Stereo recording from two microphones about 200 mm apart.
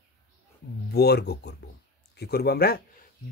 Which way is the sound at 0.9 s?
55° left (ahead or behind).